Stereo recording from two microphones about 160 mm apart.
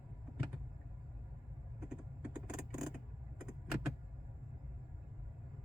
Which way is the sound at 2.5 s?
5° right (ahead or behind).